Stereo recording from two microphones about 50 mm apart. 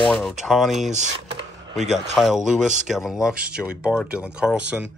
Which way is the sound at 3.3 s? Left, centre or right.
Right.